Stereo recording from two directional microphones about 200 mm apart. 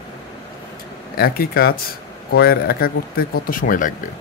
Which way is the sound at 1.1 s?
50° left (ahead or behind).